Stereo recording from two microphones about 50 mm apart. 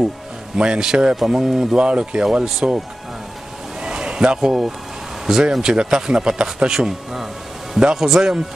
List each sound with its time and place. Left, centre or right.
0.6 s a man's voice: centre
1.8 s a man's voice: centre
3.8 s a sound: centre
5.2 s speech: centre